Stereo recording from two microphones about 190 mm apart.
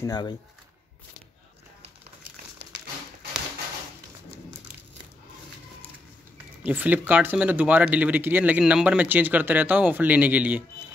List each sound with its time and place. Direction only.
0.0 s speech: 20° left (ahead or behind)
6.7 s speech: 10° right (ahead or behind)